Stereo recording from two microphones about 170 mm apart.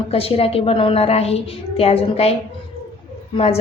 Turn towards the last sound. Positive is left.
turn(degrees=35)  # may be behind; listen again after turning